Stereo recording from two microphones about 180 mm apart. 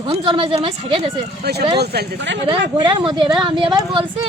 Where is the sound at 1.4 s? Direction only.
65° right (ahead or behind).